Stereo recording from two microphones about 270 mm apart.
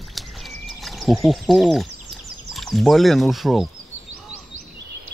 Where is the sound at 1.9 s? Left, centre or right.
Right.